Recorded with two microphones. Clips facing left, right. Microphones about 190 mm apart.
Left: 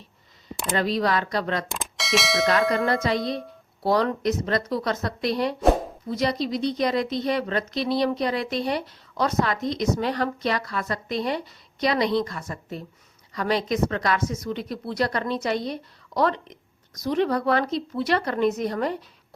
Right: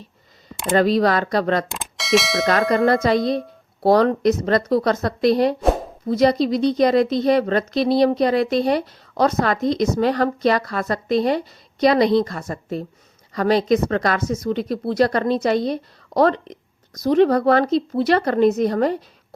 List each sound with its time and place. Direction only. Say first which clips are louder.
0.8 s a woman's voice: right 7 dB; 40° right (ahead or behind)
1.7 s speech: right 7 dB; centre (ahead or behind)
2.6 s bell: right 4 dB; centre (ahead or behind)
2.8 s a woman's voice: right 7 dB; 40° right (ahead or behind)